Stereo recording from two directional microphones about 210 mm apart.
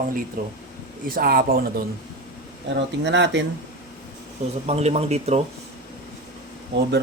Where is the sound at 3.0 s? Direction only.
55° right (ahead or behind).